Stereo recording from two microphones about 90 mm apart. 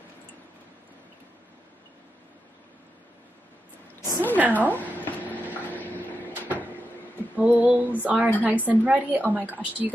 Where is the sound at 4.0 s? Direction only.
25° left (ahead or behind).